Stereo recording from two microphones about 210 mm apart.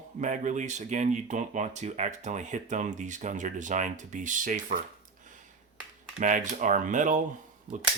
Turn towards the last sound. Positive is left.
turn(degrees=-5)  # may be behind; listen again after turning